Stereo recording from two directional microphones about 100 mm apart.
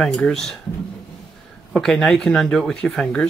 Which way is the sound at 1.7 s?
5° left (ahead or behind).